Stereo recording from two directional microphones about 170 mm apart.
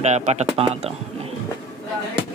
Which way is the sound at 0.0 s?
40° right (ahead or behind).